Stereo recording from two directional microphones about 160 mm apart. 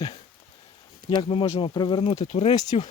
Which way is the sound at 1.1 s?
30° left (ahead or behind).